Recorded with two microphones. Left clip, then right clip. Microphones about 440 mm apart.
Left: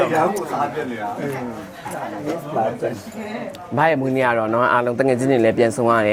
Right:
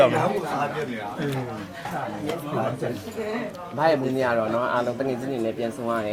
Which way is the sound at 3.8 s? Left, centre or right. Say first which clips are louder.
Left 4 dB; left.